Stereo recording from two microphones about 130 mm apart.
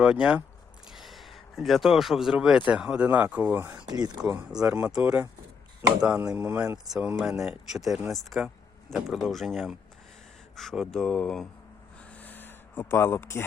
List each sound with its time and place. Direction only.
0.0 s speech: 10° right (ahead or behind)
3.8 s speech: 30° right (ahead or behind)
4.3 s speech: 10° right (ahead or behind)
12.1 s a sound: 15° left (ahead or behind)